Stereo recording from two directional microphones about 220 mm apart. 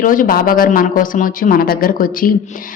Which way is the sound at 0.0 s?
40° left (ahead or behind).